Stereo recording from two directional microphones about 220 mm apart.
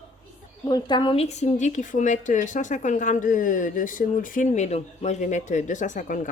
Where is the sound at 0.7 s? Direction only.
20° left (ahead or behind).